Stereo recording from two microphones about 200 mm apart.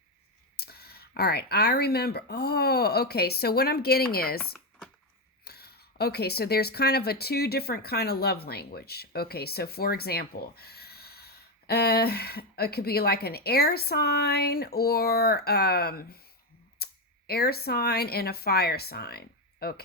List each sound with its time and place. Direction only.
0.5 s speech: 50° left (ahead or behind)
4.4 s a sound: 5° left (ahead or behind)
5.5 s speech: 50° left (ahead or behind)